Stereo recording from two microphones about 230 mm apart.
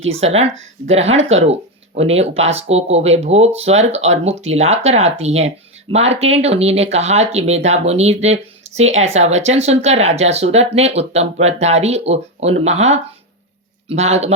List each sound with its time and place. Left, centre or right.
0.2 s speech: right